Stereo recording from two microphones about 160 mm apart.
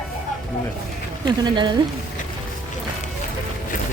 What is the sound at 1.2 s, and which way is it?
Speech, 25° right (ahead or behind).